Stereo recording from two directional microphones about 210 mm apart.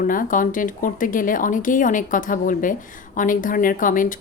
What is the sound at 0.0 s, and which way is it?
A woman's voice, 40° left (ahead or behind).